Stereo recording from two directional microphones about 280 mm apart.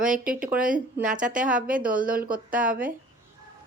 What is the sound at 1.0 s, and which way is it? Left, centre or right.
Speech, right.